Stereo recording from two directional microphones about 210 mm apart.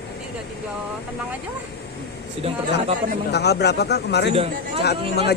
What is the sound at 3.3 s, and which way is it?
Speech, 50° left (ahead or behind).